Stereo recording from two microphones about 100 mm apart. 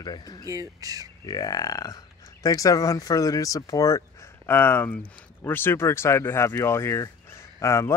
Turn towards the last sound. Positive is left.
turn(degrees=30)  # may be behind; listen again after turning